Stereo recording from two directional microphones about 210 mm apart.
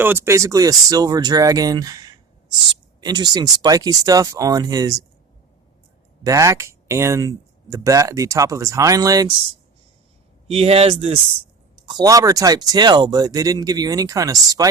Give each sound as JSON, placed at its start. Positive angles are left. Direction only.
{"t": 0.0, "sound": "speech", "side_deg": -10}
{"t": 6.2, "sound": "speech", "side_deg": -15}
{"t": 10.5, "sound": "speech", "side_deg": -30}
{"t": 11.9, "sound": "speech", "side_deg": -15}